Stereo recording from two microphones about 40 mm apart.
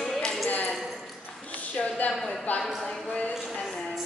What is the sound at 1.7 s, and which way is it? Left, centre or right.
Speech, left.